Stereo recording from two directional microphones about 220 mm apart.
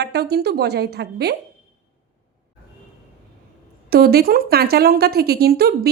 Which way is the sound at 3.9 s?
45° right (ahead or behind).